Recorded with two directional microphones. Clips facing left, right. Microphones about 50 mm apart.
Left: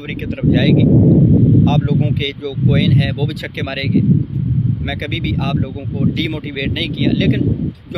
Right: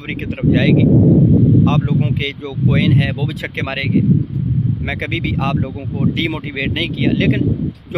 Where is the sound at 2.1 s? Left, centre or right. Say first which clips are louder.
Left 1 dB; right.